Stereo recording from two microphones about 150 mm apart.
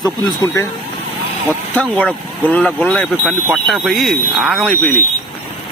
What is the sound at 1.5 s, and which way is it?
Speech, 10° left (ahead or behind).